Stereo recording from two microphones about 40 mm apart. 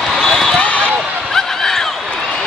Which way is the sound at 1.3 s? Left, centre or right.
Centre.